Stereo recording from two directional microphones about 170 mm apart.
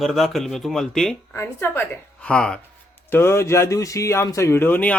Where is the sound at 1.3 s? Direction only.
15° left (ahead or behind).